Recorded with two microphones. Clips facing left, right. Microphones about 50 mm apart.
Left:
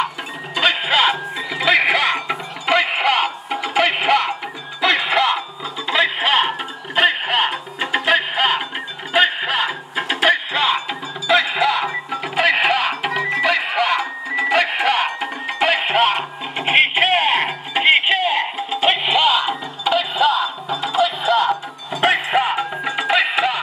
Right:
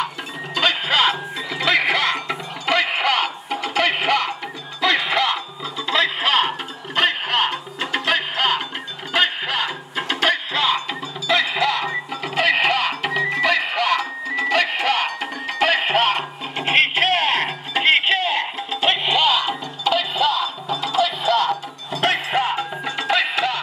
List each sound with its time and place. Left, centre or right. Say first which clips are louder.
0.6 s music: left 2 dB; centre